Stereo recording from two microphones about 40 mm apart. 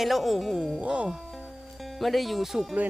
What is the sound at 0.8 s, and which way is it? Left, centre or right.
Speech, right.